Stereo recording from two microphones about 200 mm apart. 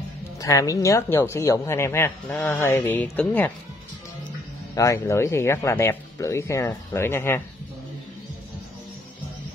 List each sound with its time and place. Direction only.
0.4 s speech: 15° left (ahead or behind)
4.7 s speech: 15° left (ahead or behind)